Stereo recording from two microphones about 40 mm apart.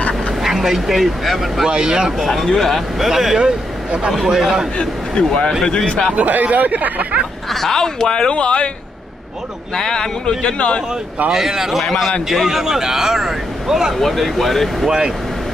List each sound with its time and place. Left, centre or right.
0.4 s speech: centre
1.7 s speech: right
2.2 s speech: centre
3.3 s speech: right
4.7 s speech: left
6.1 s speech: right
7.6 s speech: centre
9.8 s speech: centre
11.3 s speech: centre
13.9 s speech: centre
14.9 s speech: centre